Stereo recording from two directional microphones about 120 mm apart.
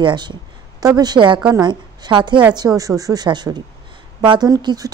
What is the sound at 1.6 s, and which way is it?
Speech, 40° right (ahead or behind).